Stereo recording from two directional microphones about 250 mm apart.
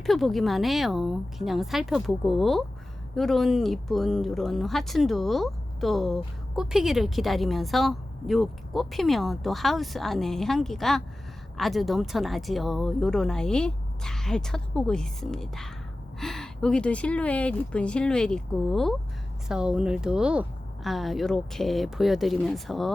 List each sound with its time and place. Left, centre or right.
0.0 s a woman's voice: centre